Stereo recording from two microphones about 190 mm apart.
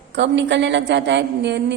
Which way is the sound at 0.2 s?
70° right (ahead or behind).